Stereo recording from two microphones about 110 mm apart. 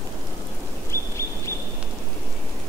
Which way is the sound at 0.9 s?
25° left (ahead or behind).